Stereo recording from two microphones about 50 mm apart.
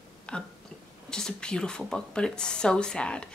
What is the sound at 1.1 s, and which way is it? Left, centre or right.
A woman's voice, centre.